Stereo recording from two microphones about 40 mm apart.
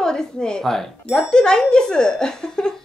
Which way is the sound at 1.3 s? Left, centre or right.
Centre.